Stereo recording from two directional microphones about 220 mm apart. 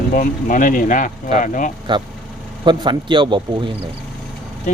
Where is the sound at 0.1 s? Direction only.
40° left (ahead or behind).